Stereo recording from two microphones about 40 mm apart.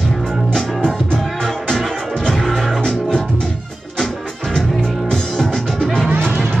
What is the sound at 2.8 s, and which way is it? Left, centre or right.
Music, left.